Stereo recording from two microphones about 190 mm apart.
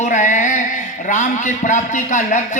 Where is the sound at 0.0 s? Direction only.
40° left (ahead or behind).